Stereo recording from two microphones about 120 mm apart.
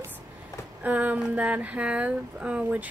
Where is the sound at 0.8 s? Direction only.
15° right (ahead or behind).